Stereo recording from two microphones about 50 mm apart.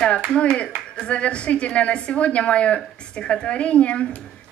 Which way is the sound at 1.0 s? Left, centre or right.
Left.